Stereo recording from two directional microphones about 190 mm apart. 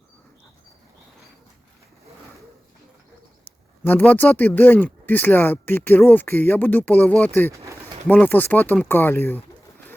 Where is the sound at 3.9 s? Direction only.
10° left (ahead or behind).